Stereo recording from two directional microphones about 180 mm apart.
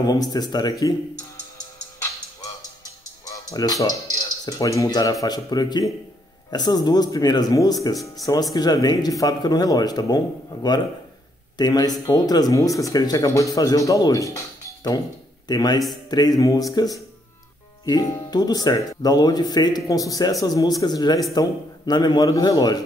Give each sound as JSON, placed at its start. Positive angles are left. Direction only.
{"t": 0.0, "sound": "speech", "side_deg": 20}
{"t": 2.4, "sound": "music", "side_deg": 20}
{"t": 5.2, "sound": "speech", "side_deg": 20}
{"t": 7.9, "sound": "speech", "side_deg": 0}
{"t": 8.5, "sound": "speech", "side_deg": 20}